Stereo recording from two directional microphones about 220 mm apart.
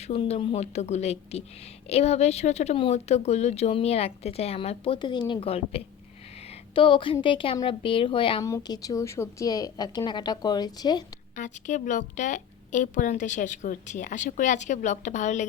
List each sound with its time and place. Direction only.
0.0 s a woman's voice: 30° left (ahead or behind)
11.3 s a woman's voice: 35° left (ahead or behind)